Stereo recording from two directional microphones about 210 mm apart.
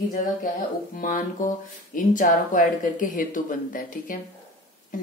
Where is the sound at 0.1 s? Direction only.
40° left (ahead or behind).